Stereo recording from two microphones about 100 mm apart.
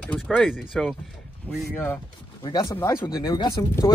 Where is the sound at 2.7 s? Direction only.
20° left (ahead or behind).